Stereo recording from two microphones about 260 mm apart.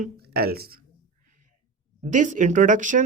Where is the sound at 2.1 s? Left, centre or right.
Right.